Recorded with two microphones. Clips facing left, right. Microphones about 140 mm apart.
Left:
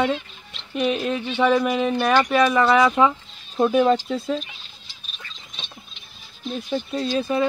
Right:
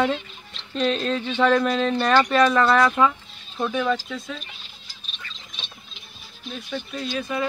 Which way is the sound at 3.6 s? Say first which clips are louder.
Left 6 dB; 40° left (ahead or behind).